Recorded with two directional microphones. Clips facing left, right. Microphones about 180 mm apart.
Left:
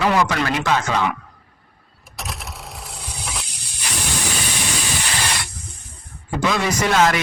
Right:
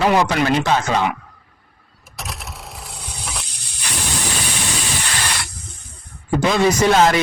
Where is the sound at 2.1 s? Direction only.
Centre (ahead or behind).